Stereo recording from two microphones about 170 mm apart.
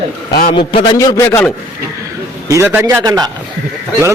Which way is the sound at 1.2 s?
10° left (ahead or behind).